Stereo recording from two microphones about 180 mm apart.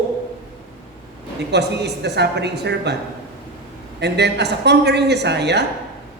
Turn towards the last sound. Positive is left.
turn(degrees=-70)  # may be behind; listen again after turning